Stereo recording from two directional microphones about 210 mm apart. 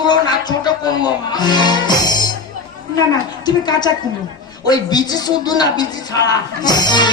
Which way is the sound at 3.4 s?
20° left (ahead or behind).